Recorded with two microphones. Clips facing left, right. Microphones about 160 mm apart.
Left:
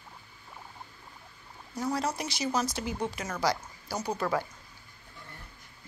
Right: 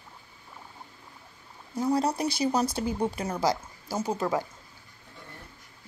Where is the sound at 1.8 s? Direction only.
30° right (ahead or behind).